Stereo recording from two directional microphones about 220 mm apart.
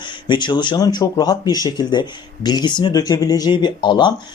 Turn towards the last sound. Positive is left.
turn(degrees=20)  # may be behind; listen again after turning